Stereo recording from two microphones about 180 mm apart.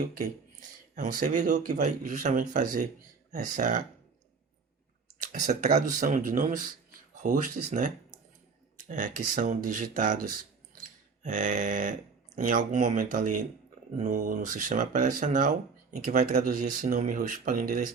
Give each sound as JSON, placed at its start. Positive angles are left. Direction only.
{"t": 1.2, "sound": "speech", "side_deg": -45}
{"t": 5.3, "sound": "speech", "side_deg": -45}